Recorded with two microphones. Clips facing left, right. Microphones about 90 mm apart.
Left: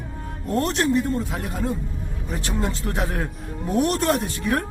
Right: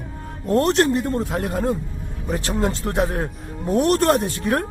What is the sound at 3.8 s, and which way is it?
Speech, 50° right (ahead or behind).